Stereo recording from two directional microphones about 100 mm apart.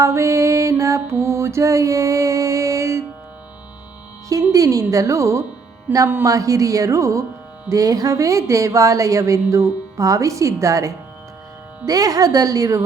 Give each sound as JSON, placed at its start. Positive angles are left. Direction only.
{"t": 0.0, "sound": "mantra", "side_deg": -30}
{"t": 4.3, "sound": "speech", "side_deg": -35}
{"t": 6.2, "sound": "speech", "side_deg": -35}